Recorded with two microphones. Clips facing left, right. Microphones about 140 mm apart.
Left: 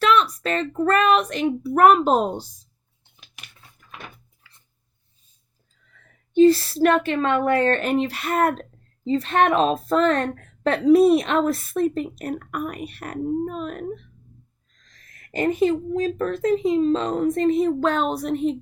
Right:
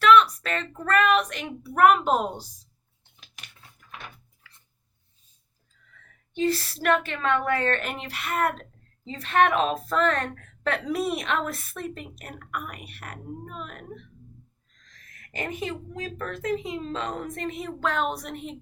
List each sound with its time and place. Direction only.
0.0 s a woman's voice: 30° left (ahead or behind)
3.2 s a sound: 5° left (ahead or behind)
6.3 s a woman's voice: 35° left (ahead or behind)
15.3 s a woman's voice: 35° left (ahead or behind)